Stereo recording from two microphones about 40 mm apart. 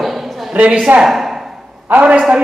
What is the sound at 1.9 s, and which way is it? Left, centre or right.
Speech, right.